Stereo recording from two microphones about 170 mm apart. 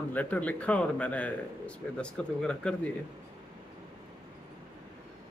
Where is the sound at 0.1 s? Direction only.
10° left (ahead or behind).